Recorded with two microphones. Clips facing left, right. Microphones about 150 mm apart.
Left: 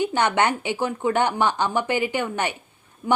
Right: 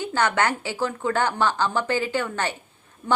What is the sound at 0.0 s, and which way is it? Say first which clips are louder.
A woman's voice: left 2 dB; 20° left (ahead or behind).